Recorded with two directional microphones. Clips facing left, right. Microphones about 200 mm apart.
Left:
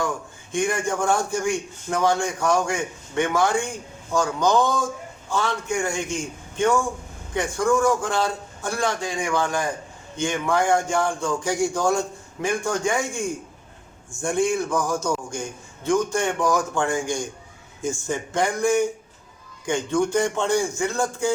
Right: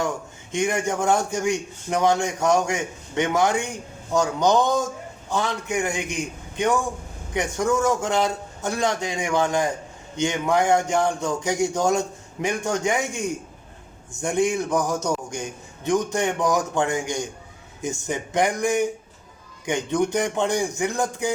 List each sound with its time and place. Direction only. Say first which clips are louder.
0.5 s a man's voice: even; 20° right (ahead or behind)